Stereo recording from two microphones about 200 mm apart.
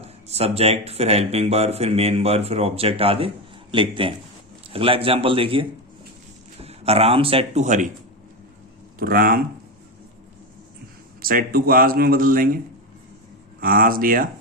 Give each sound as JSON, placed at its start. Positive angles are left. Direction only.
{"t": 0.0, "sound": "a man's voice", "side_deg": -30}
{"t": 9.0, "sound": "speech", "side_deg": -45}
{"t": 11.2, "sound": "speech", "side_deg": -45}
{"t": 13.6, "sound": "speech", "side_deg": -45}